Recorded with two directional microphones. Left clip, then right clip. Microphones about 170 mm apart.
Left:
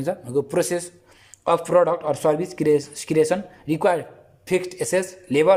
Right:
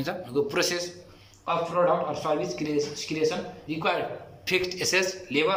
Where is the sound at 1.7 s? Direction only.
60° left (ahead or behind).